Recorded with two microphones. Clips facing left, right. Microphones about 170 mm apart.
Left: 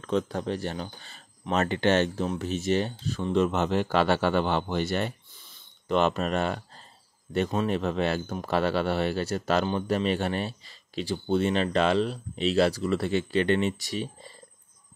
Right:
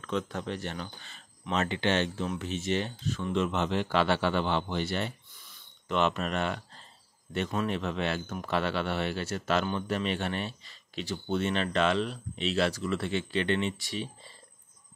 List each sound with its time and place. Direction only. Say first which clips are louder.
0.0 s speech: left 5 dB; 35° left (ahead or behind)